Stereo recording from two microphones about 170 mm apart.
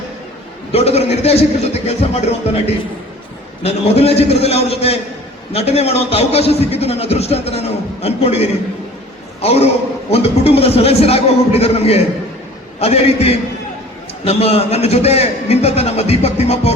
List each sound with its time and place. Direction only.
0.7 s a man's voice: 35° left (ahead or behind)